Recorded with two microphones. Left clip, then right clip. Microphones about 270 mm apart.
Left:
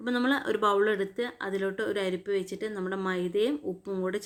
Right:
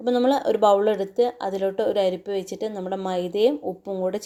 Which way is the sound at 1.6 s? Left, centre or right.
Right.